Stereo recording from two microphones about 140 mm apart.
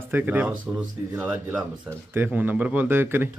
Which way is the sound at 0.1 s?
10° right (ahead or behind).